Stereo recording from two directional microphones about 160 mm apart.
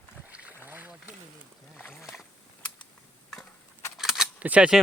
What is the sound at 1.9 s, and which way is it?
Boat, centre (ahead or behind).